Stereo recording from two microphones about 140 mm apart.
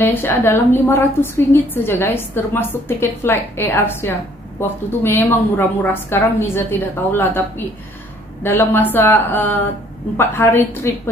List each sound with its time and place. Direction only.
0.0 s a woman's voice: 15° left (ahead or behind)